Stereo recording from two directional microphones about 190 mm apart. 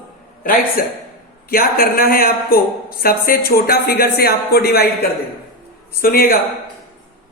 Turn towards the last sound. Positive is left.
turn(degrees=50)  # may be behind; listen again after turning